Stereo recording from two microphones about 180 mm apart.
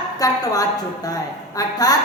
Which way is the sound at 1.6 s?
20° left (ahead or behind).